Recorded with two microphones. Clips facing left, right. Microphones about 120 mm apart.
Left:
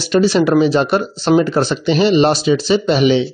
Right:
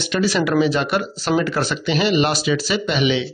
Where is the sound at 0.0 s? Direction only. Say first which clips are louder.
Left 7 dB; 30° left (ahead or behind).